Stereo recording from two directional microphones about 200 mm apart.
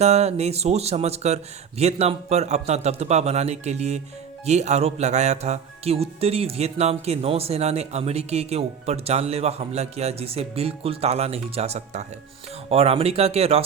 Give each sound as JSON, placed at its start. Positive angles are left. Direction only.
{"t": 0.0, "sound": "music", "side_deg": -30}